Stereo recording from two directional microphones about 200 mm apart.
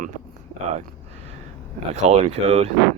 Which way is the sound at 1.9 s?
35° right (ahead or behind).